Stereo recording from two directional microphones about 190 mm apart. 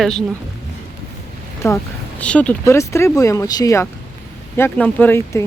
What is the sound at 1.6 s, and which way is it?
Speech, 15° left (ahead or behind).